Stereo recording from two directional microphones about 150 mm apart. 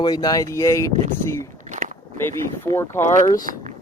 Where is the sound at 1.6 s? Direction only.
55° right (ahead or behind).